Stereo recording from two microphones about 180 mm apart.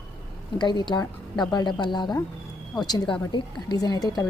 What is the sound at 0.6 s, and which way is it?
A woman's voice, 25° left (ahead or behind).